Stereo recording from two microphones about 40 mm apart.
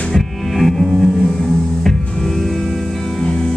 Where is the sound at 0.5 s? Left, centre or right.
Centre.